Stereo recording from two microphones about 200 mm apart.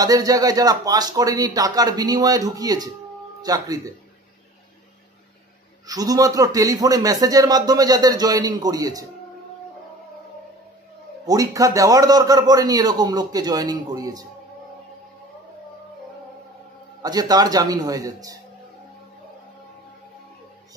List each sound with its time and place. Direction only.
0.0 s a man's voice: 20° right (ahead or behind)
5.9 s speech: 20° right (ahead or behind)
11.2 s a man's voice: 15° right (ahead or behind)
17.0 s a man's voice: 20° right (ahead or behind)